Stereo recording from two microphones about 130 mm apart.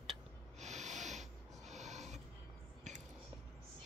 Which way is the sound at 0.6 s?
65° right (ahead or behind).